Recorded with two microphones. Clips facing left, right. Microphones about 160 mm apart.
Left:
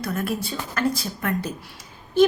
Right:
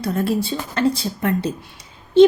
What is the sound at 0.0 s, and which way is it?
A woman's voice, 30° right (ahead or behind).